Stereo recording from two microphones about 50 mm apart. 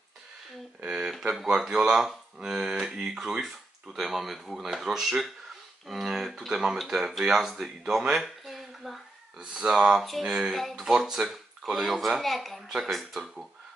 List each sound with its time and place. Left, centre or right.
0.8 s speech: centre
1.5 s speech: centre
8.2 s a sound: centre
9.4 s speech: centre